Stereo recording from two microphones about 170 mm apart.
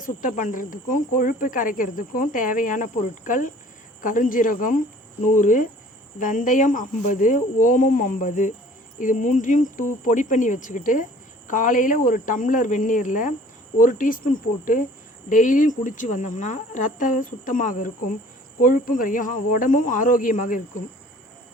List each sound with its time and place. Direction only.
0.0 s speech: 50° left (ahead or behind)